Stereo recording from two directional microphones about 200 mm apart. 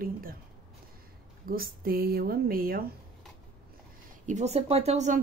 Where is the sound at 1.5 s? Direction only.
50° right (ahead or behind).